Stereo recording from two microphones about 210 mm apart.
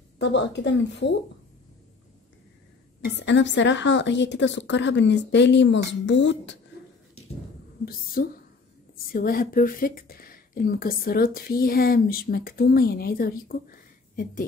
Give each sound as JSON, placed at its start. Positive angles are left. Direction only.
{"t": 0.2, "sound": "a woman's voice", "side_deg": 55}
{"t": 3.2, "sound": "a woman's voice", "side_deg": 60}
{"t": 7.8, "sound": "speech", "side_deg": 45}